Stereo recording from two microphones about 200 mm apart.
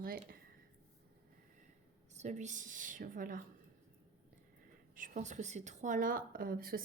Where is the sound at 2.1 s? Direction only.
35° right (ahead or behind).